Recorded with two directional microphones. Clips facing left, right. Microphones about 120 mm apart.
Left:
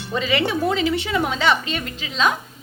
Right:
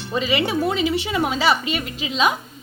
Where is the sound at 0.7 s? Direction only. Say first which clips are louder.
Left 1 dB; 15° right (ahead or behind).